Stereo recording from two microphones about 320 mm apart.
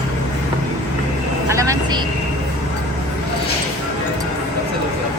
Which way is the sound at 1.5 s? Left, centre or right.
Centre.